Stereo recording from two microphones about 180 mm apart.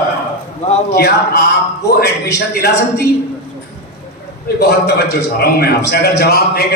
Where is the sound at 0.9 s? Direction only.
60° left (ahead or behind).